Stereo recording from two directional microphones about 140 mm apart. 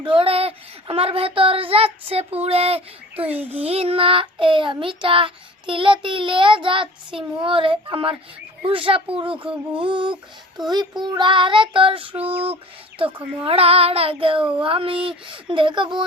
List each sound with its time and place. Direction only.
0.0 s speech: 40° right (ahead or behind)
5.0 s child singing: 40° right (ahead or behind)
13.4 s speech: 45° right (ahead or behind)
14.6 s child singing: 40° right (ahead or behind)